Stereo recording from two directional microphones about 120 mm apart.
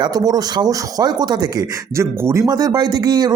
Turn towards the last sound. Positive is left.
turn(degrees=-35)  # may be behind; listen again after turning